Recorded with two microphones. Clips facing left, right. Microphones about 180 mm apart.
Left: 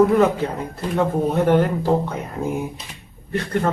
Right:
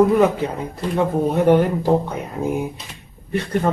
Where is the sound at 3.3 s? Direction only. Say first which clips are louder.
Right 1 dB; 15° right (ahead or behind).